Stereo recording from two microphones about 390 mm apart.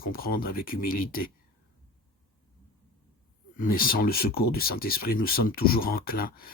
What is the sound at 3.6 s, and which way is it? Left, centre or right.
Speech, left.